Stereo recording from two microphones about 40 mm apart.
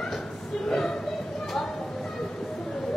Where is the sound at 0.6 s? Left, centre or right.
Centre.